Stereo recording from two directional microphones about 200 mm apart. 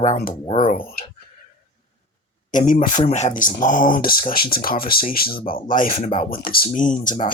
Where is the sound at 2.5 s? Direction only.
40° left (ahead or behind).